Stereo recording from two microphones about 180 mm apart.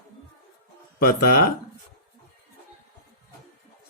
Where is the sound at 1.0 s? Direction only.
55° left (ahead or behind).